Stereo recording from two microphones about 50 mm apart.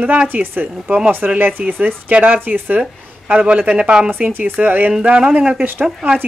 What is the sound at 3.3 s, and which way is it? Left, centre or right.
Speech, right.